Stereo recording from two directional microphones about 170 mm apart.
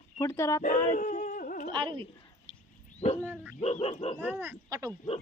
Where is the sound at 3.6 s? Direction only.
35° left (ahead or behind).